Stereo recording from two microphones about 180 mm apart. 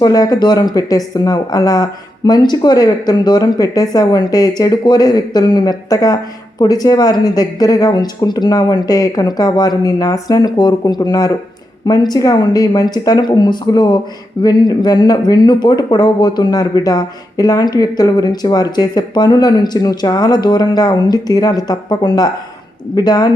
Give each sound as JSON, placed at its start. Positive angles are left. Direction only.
{"t": 0.0, "sound": "speech", "side_deg": 20}